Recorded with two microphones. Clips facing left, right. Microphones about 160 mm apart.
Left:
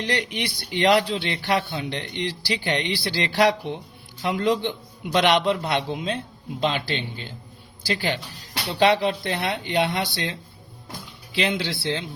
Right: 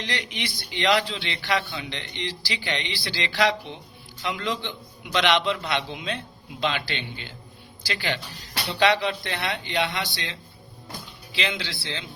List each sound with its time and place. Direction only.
0.0 s a man's voice: 55° left (ahead or behind)